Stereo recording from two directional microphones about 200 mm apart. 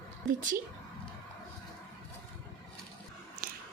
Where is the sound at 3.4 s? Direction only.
45° right (ahead or behind).